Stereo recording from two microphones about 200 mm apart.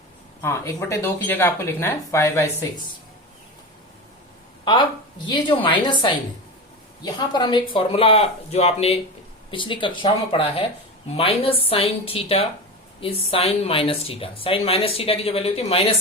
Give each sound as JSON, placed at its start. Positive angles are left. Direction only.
{"t": 0.4, "sound": "speech", "side_deg": 15}
{"t": 4.6, "sound": "speech", "side_deg": 25}